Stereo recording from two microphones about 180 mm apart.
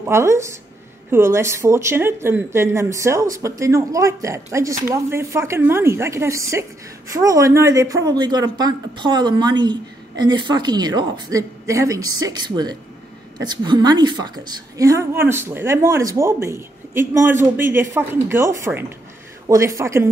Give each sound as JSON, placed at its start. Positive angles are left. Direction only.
{"t": 0.0, "sound": "a woman's voice", "side_deg": -15}